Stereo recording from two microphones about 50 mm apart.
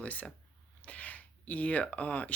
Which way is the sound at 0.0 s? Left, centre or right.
Left.